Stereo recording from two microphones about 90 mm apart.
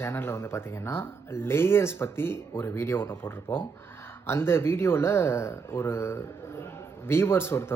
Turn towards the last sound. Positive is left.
turn(degrees=30)  # may be behind; listen again after turning